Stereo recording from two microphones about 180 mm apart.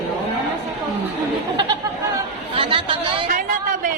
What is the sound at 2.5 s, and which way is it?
Speech, 30° right (ahead or behind).